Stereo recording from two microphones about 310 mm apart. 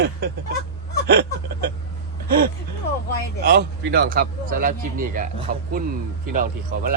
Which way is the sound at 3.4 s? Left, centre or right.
Right.